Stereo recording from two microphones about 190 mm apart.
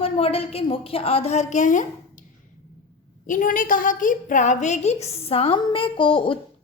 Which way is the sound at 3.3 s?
45° left (ahead or behind).